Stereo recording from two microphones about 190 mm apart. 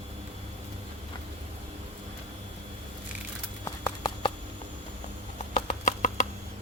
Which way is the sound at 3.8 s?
25° left (ahead or behind).